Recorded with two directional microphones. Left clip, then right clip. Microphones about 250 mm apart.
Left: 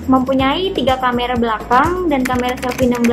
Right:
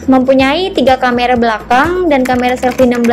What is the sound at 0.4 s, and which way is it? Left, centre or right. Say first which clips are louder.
A woman's voice: right 5 dB; right.